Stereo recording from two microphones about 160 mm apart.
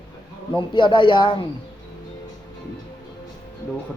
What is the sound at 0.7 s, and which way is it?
Speech, 30° left (ahead or behind).